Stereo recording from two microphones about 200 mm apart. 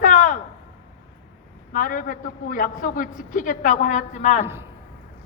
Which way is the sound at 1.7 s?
45° left (ahead or behind).